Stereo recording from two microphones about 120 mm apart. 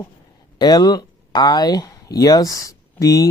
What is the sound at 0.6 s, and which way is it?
Speech, 35° left (ahead or behind).